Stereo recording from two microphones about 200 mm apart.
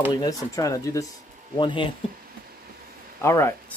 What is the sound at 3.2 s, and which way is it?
Speech, 15° left (ahead or behind).